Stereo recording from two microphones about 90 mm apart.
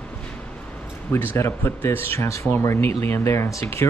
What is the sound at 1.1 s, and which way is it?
Speech, 25° left (ahead or behind).